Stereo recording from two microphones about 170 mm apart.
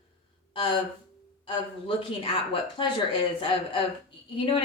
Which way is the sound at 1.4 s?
30° left (ahead or behind).